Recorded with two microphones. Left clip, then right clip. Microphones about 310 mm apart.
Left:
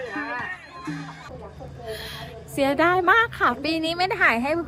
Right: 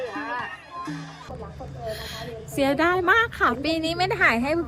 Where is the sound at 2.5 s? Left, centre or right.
Centre.